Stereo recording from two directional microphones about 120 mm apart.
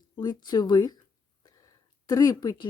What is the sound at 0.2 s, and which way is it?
Speech, 35° left (ahead or behind).